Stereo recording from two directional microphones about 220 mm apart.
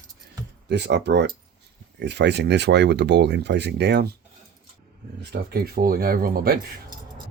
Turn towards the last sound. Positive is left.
turn(degrees=-40)  # may be behind; listen again after turning